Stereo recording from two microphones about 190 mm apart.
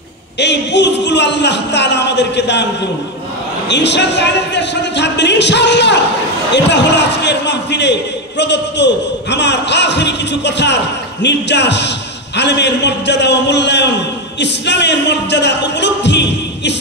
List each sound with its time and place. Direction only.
0.4 s a man's voice: 65° left (ahead or behind)
3.6 s a man's voice: 65° left (ahead or behind)